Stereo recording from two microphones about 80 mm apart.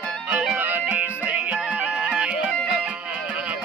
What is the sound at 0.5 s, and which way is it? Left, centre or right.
Music, right.